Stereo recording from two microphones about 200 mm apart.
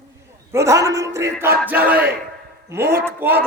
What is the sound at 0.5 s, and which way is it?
A man's voice, 15° right (ahead or behind).